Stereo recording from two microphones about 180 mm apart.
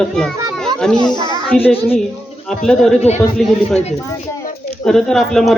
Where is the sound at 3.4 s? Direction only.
Centre (ahead or behind).